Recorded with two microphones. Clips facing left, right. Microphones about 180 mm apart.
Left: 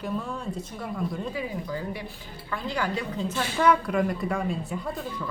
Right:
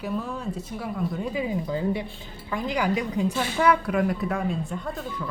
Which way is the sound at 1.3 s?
20° right (ahead or behind).